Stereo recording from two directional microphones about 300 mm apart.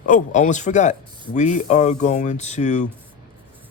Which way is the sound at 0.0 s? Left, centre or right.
Left.